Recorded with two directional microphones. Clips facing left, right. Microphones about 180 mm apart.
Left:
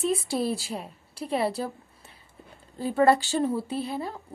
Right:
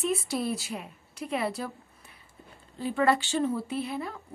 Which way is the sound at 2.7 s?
35° left (ahead or behind).